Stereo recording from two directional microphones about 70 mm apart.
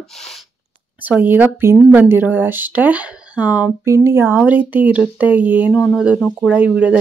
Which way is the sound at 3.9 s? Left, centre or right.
Right.